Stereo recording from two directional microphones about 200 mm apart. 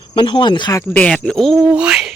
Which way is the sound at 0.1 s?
20° left (ahead or behind).